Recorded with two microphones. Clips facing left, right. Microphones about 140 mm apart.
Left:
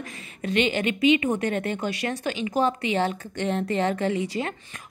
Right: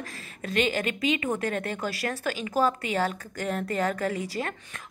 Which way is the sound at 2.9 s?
25° left (ahead or behind).